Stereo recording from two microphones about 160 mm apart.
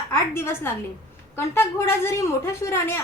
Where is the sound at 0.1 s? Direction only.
15° left (ahead or behind).